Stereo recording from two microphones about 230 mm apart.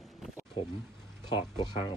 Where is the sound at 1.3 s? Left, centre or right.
Centre.